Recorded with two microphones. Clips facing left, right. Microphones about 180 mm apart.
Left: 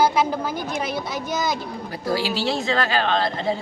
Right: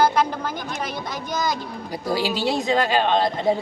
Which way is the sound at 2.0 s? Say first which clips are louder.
Even; 15° right (ahead or behind).